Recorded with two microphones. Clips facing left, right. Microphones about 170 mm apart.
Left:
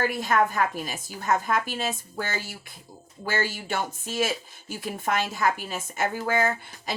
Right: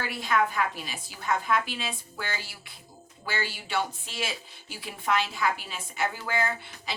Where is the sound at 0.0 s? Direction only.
45° left (ahead or behind).